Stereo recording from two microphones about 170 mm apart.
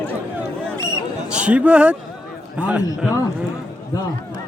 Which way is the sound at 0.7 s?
25° right (ahead or behind).